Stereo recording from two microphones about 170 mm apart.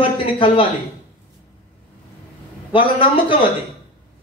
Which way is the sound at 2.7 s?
30° left (ahead or behind).